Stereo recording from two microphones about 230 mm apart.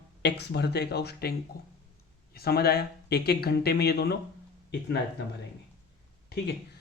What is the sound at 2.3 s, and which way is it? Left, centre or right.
Speech, left.